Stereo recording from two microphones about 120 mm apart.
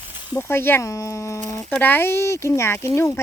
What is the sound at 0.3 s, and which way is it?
Speech, 20° left (ahead or behind).